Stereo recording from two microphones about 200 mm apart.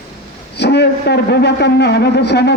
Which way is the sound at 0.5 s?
55° left (ahead or behind).